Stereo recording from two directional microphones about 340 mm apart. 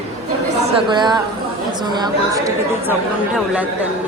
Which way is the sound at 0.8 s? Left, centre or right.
Centre.